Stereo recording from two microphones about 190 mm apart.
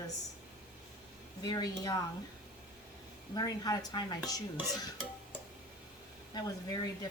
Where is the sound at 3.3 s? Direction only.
20° left (ahead or behind).